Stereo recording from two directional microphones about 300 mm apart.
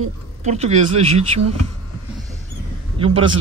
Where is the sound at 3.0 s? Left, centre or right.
Centre.